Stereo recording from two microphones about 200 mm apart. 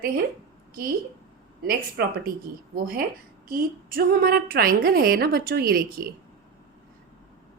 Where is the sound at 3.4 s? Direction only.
45° right (ahead or behind).